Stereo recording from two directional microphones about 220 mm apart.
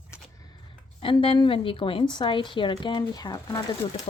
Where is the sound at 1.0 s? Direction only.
25° left (ahead or behind).